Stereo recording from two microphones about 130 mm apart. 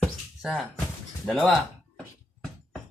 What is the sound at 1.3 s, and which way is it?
Speech, centre (ahead or behind).